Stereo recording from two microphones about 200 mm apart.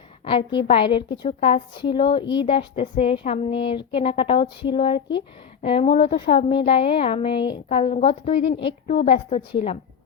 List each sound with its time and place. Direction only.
0.3 s a woman's voice: 30° left (ahead or behind)